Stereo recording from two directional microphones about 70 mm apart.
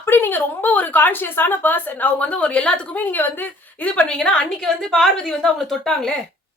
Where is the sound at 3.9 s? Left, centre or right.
Centre.